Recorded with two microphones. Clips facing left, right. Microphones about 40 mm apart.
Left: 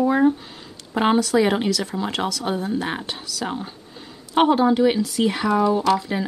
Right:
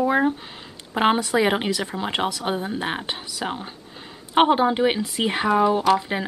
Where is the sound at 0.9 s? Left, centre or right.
Right.